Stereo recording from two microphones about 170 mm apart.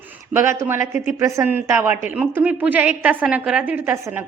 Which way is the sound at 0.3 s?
15° right (ahead or behind).